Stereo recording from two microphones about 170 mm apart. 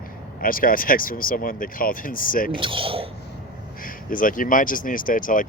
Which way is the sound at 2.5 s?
30° right (ahead or behind).